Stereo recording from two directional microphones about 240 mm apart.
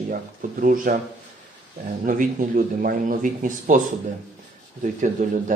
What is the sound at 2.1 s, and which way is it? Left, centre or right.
Speech, right.